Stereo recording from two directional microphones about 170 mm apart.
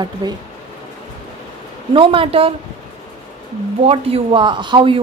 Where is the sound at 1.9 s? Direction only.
30° right (ahead or behind).